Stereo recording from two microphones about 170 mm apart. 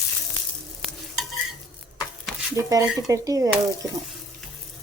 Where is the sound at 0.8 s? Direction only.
Centre (ahead or behind).